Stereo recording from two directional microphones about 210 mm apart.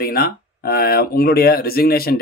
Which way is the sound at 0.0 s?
45° left (ahead or behind).